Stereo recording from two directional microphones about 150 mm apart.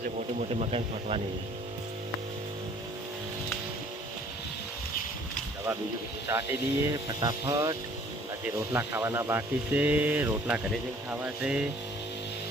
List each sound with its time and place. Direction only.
0.3 s speech: 45° right (ahead or behind)
6.2 s speech: 20° right (ahead or behind)